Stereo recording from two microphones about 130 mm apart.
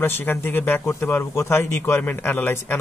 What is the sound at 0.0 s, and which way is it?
A man's voice, 15° left (ahead or behind).